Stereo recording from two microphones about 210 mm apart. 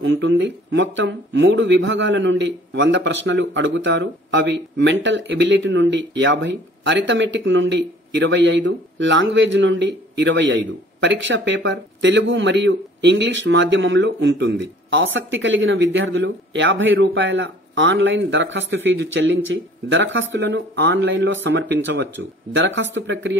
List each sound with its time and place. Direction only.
0.0 s speech: 60° right (ahead or behind)